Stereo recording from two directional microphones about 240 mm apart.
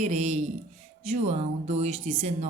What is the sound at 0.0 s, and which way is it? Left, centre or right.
Speech, right.